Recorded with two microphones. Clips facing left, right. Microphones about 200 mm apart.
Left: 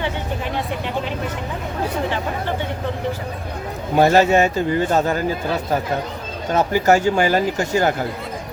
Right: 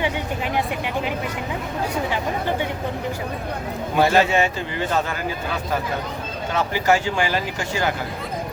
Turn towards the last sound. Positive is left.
turn(degrees=45)  # may be behind; listen again after turning